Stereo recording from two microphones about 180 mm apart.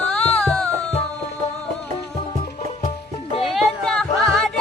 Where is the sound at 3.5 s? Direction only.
Centre (ahead or behind).